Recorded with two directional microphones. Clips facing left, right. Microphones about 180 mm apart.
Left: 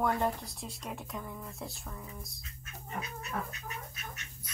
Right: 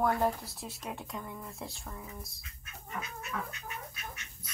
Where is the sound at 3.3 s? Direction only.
40° left (ahead or behind).